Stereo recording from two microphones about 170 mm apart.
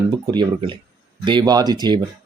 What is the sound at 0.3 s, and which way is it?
Speech, 25° right (ahead or behind).